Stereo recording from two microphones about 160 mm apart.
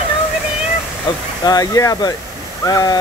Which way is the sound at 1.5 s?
20° left (ahead or behind).